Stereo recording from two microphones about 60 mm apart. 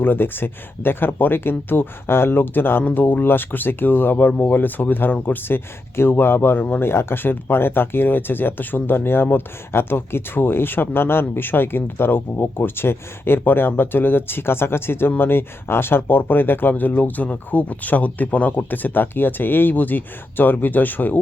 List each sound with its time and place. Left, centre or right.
0.0 s speech: left